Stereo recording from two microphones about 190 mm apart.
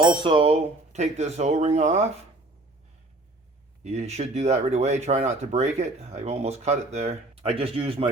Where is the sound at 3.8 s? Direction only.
35° right (ahead or behind).